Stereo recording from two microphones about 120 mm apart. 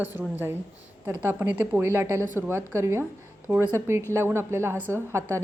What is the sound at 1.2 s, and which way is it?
A woman's voice, 20° right (ahead or behind).